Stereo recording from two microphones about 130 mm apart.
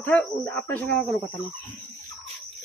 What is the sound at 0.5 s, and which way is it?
Speech, 10° left (ahead or behind).